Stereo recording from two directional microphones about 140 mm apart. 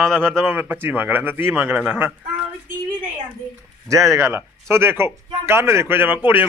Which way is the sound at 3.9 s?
20° right (ahead or behind).